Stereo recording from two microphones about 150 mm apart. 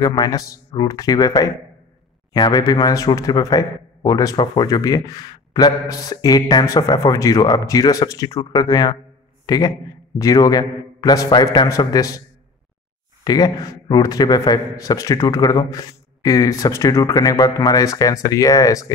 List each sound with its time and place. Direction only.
0.0 s speech: 25° left (ahead or behind)
13.2 s speech: 25° left (ahead or behind)